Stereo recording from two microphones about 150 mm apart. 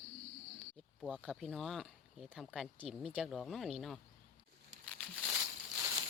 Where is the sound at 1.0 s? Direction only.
5° left (ahead or behind).